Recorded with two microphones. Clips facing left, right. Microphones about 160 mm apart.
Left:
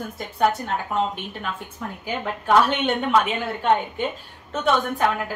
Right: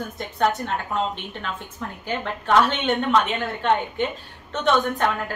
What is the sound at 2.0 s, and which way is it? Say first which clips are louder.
A woman's voice: left 1 dB; 10° left (ahead or behind).